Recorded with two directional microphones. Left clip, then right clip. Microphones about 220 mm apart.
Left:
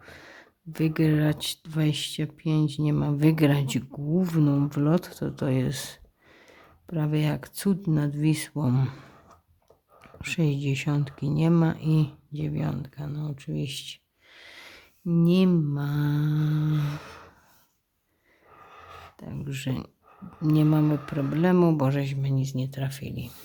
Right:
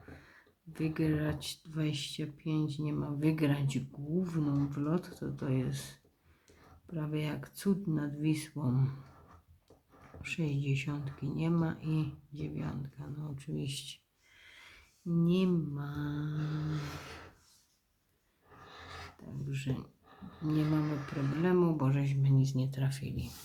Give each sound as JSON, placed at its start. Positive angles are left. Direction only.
{"t": 0.0, "sound": "speech", "side_deg": 50}
{"t": 10.2, "sound": "speech", "side_deg": 45}
{"t": 19.5, "sound": "speech", "side_deg": 50}